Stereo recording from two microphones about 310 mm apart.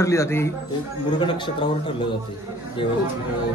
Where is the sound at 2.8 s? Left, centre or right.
Centre.